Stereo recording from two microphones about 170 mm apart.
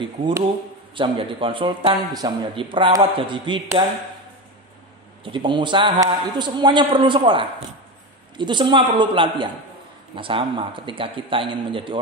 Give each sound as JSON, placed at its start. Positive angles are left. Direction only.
{"t": 0.2, "sound": "speech", "side_deg": -30}
{"t": 5.2, "sound": "a man's voice", "side_deg": -30}